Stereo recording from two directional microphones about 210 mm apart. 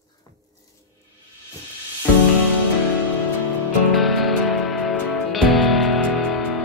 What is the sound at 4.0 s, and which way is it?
Music, centre (ahead or behind).